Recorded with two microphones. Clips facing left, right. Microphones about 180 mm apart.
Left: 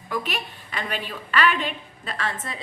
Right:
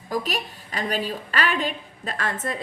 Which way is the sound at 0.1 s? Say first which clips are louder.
Right 2 dB; 40° right (ahead or behind).